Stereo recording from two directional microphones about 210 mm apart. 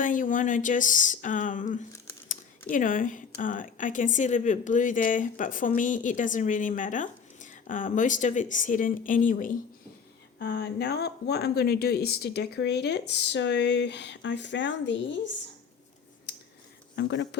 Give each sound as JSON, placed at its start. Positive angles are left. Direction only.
{"t": 0.0, "sound": "speech", "side_deg": 40}
{"t": 10.3, "sound": "speech", "side_deg": 55}
{"t": 16.3, "sound": "whispering", "side_deg": 55}
{"t": 16.9, "sound": "speech", "side_deg": 55}